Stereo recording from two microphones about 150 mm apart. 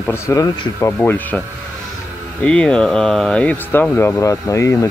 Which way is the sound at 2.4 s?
5° left (ahead or behind).